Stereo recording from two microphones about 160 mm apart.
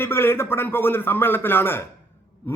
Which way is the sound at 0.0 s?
15° left (ahead or behind).